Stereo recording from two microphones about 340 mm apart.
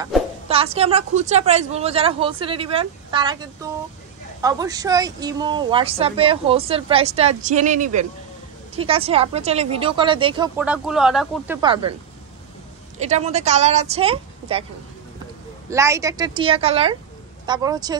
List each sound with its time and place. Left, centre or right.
0.5 s a woman's voice: centre
13.0 s a woman's voice: centre
15.7 s a woman's voice: centre